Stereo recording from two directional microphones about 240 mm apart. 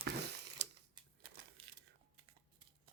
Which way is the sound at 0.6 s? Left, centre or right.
Right.